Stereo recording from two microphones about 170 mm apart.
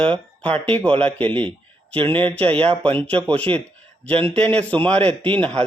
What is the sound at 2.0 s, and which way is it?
Speech, 30° right (ahead or behind).